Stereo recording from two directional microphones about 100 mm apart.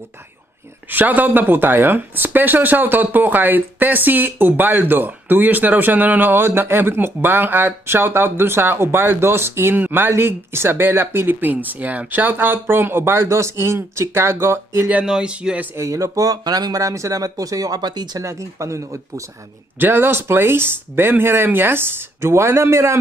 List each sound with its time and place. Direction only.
0.8 s speech: 20° right (ahead or behind)
15.0 s speech: 10° right (ahead or behind)
15.7 s speech: 30° right (ahead or behind)
18.2 s speech: 30° right (ahead or behind)